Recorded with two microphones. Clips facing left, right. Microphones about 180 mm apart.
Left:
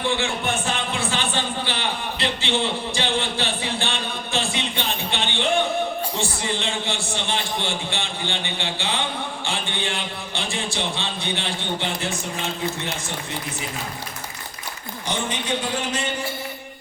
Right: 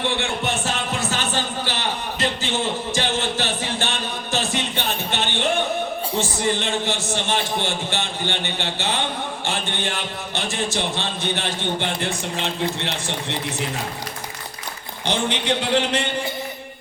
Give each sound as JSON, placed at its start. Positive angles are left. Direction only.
{"t": 0.9, "sound": "a sound", "side_deg": -40}
{"t": 5.1, "sound": "music", "side_deg": -45}
{"t": 6.1, "sound": "a man's voice", "side_deg": -45}
{"t": 15.0, "sound": "a man's voice", "side_deg": -70}